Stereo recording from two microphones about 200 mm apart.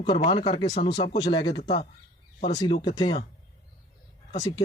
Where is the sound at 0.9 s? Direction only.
55° left (ahead or behind).